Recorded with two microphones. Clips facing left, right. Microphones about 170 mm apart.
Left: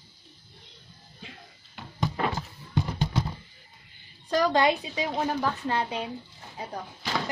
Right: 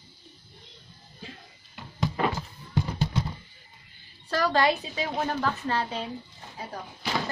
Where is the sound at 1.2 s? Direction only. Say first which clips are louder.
Right 3 dB; 35° right (ahead or behind).